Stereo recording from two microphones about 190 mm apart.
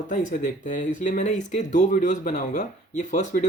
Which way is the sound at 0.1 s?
45° left (ahead or behind).